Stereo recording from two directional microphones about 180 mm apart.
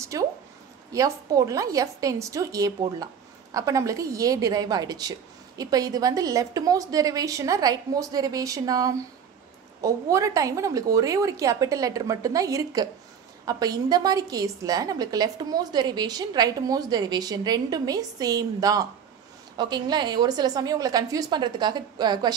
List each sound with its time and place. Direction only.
0.0 s a woman's voice: 20° right (ahead or behind)